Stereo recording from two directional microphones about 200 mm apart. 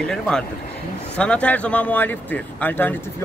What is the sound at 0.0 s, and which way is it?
Speech, 5° left (ahead or behind).